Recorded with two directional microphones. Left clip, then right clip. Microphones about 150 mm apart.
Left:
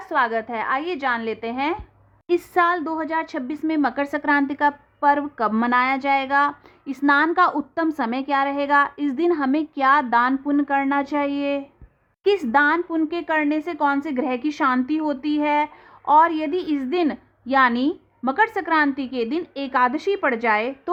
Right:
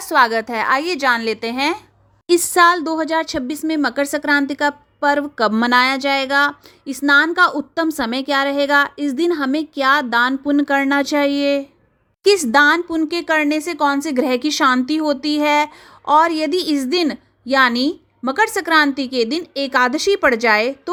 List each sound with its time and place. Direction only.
0.1 s a woman's voice: 35° right (ahead or behind); by 10.5 s 20° right (ahead or behind)
10.5 s a woman's voice: 35° right (ahead or behind)